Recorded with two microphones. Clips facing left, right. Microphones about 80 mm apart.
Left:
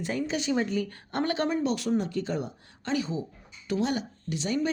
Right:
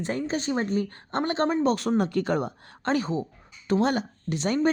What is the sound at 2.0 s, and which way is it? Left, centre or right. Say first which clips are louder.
A woman's voice: right 5 dB; right.